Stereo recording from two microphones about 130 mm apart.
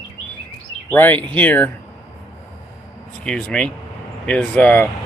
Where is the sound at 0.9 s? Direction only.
15° left (ahead or behind).